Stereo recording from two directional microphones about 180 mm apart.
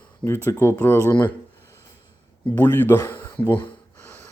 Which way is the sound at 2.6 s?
10° left (ahead or behind).